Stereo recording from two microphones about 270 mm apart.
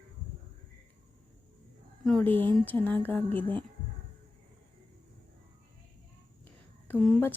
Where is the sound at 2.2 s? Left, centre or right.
Centre.